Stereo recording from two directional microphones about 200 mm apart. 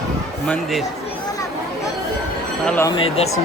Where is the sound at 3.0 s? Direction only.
30° left (ahead or behind).